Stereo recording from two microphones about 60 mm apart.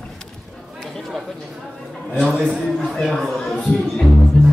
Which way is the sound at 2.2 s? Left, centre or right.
Centre.